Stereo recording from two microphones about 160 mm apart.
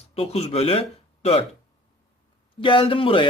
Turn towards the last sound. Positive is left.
turn(degrees=35)  # may be behind; listen again after turning